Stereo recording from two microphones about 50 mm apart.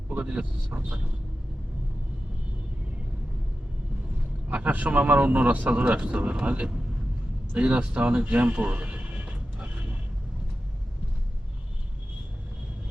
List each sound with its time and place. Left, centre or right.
0.2 s speech: right
4.4 s speech: right